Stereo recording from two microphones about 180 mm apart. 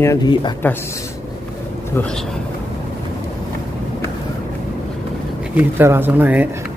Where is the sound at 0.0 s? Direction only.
20° left (ahead or behind).